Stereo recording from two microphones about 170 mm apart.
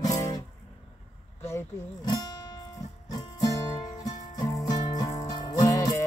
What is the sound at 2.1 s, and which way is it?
Music, 20° left (ahead or behind).